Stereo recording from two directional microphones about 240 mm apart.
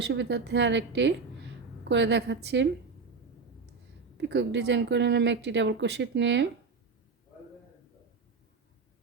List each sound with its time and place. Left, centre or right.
0.0 s a woman's voice: right
4.2 s speech: right